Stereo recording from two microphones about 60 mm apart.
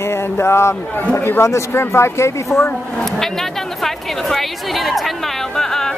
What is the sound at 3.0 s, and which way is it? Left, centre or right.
A woman's voice, centre.